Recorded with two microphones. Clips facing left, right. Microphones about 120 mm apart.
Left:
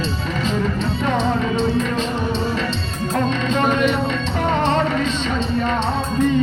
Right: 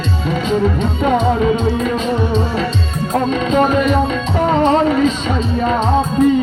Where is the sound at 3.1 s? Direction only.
40° right (ahead or behind).